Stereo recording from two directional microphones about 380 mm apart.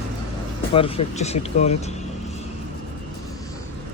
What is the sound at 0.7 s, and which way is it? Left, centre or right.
Speech, centre.